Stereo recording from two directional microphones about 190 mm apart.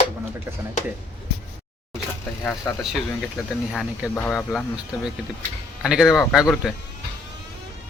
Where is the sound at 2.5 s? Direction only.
Centre (ahead or behind).